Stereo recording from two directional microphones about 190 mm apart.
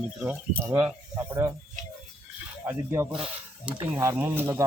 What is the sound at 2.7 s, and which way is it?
Speech, 10° right (ahead or behind).